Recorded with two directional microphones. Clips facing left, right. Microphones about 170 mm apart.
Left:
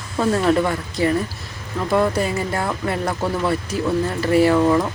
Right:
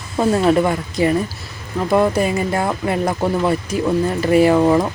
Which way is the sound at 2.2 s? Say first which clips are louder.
Right 4 dB; 15° right (ahead or behind).